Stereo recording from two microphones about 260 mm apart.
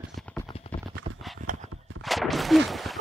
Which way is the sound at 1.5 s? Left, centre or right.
Right.